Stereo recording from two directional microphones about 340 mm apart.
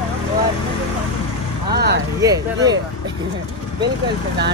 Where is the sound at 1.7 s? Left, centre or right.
Right.